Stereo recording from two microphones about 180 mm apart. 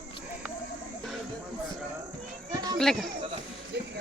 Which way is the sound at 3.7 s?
70° right (ahead or behind).